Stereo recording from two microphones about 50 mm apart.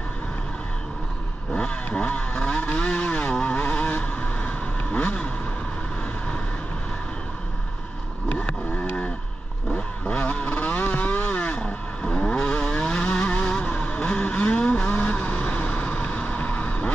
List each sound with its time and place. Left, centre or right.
1.5 s vehicle: centre
8.3 s vehicle: left